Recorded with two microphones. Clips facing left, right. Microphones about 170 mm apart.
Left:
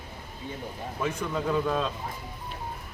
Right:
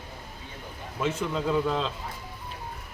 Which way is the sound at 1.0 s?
15° right (ahead or behind).